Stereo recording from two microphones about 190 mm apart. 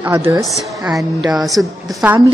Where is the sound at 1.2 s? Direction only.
Centre (ahead or behind).